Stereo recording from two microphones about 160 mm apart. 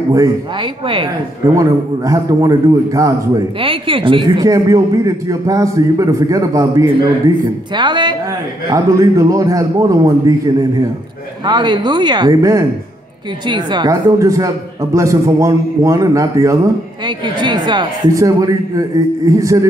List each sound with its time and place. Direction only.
0.1 s speech: 25° right (ahead or behind)
1.5 s a man's voice: 20° right (ahead or behind)
3.6 s speech: 35° right (ahead or behind)
4.5 s a man's voice: 20° right (ahead or behind)